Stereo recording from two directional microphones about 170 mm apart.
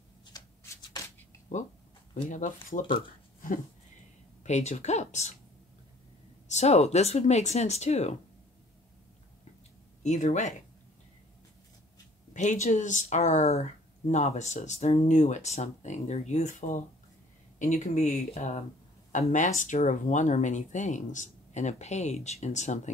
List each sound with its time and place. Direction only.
0.3 s shuffling cards: 20° left (ahead or behind)
2.2 s speech: 50° left (ahead or behind)
4.4 s speech: 45° left (ahead or behind)
6.5 s speech: 40° left (ahead or behind)
10.0 s speech: 45° left (ahead or behind)
12.4 s speech: 45° left (ahead or behind)